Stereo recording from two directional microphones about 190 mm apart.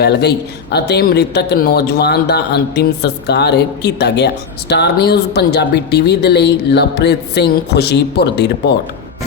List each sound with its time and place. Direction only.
0.0 s a man's voice: 60° left (ahead or behind)